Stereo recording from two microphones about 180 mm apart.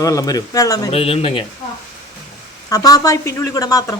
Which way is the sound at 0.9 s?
35° left (ahead or behind).